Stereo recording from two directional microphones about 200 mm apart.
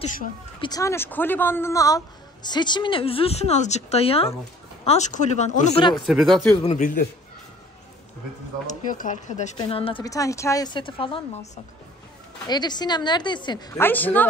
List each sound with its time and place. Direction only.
0.6 s speech: 20° left (ahead or behind); by 5.7 s 35° left (ahead or behind)
5.8 s speech: 20° left (ahead or behind)
6.0 s speech: centre (ahead or behind)
6.7 s a man's voice: 40° left (ahead or behind)
8.6 s speech: 40° left (ahead or behind); by 14.2 s 10° left (ahead or behind)